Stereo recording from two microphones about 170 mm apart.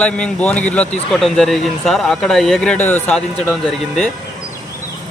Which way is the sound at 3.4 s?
Centre (ahead or behind).